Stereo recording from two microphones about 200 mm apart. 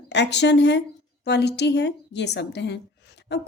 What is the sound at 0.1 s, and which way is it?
A woman's voice, 60° left (ahead or behind).